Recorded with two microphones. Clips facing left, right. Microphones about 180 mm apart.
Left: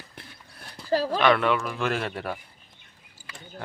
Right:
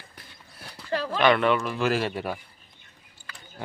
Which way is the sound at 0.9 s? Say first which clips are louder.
Left 4 dB; 35° left (ahead or behind).